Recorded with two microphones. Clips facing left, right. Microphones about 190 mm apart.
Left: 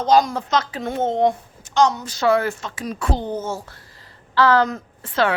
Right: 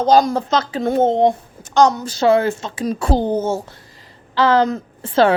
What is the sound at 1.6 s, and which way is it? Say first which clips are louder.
A woman's voice: right 4 dB; 40° right (ahead or behind).